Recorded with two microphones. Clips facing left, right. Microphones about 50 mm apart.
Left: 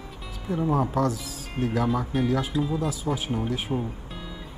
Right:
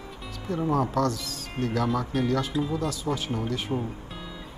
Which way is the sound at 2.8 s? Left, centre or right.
Centre.